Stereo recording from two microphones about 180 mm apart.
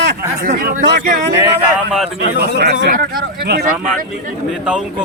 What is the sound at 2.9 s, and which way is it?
Speech, 55° right (ahead or behind).